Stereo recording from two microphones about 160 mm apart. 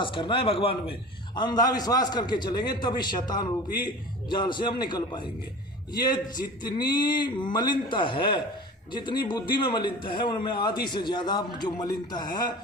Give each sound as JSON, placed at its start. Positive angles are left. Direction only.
{"t": 0.0, "sound": "a man's voice", "side_deg": 30}
{"t": 1.4, "sound": "a man's voice", "side_deg": 25}